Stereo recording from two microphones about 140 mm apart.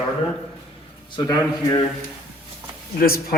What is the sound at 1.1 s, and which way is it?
Speech, 25° left (ahead or behind).